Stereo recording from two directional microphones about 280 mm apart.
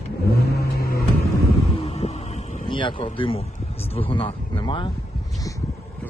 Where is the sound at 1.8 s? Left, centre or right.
Left.